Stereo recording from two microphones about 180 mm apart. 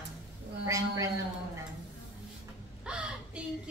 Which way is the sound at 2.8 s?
5° right (ahead or behind).